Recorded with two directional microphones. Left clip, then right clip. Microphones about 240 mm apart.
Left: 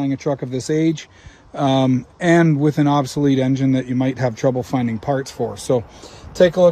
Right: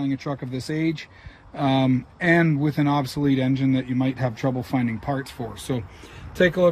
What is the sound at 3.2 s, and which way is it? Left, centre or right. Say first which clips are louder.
Speech: left 6 dB; right.